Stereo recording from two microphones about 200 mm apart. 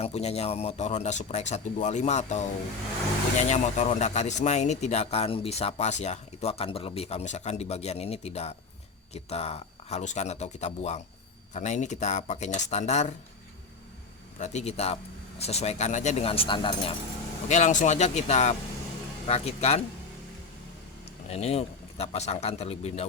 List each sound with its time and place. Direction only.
0.0 s speech: 30° left (ahead or behind)
14.3 s speech: 35° left (ahead or behind)
17.5 s speech: 35° left (ahead or behind)
21.2 s speech: 30° left (ahead or behind)